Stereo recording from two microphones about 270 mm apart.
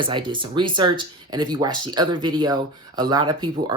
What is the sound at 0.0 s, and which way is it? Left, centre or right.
Speech, centre.